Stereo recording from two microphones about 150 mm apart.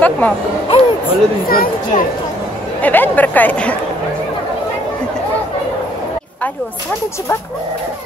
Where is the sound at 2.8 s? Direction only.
10° left (ahead or behind).